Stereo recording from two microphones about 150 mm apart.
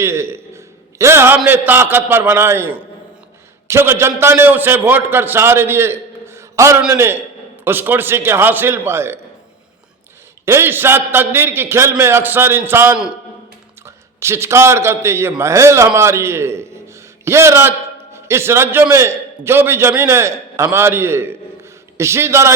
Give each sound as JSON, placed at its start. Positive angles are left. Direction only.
{"t": 0.0, "sound": "a man's voice", "side_deg": -15}
{"t": 10.4, "sound": "a man's voice", "side_deg": -15}